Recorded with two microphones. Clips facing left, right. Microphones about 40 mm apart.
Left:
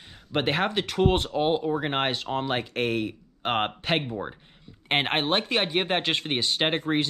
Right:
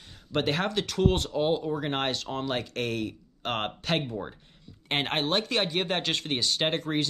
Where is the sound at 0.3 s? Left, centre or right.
Left.